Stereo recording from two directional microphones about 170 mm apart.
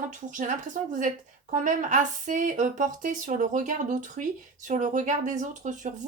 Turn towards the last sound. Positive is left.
turn(degrees=-50)  # may be behind; listen again after turning